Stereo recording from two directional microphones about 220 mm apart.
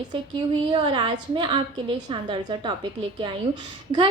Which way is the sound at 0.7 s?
20° right (ahead or behind).